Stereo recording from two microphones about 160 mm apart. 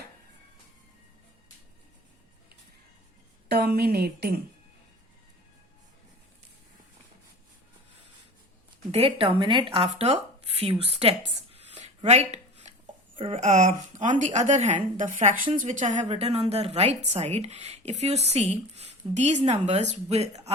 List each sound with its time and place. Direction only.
3.5 s a woman's voice: 80° right
8.9 s speech: 35° right (ahead or behind)
11.5 s a sound: 45° right (ahead or behind)
13.1 s a woman's voice: 40° right (ahead or behind)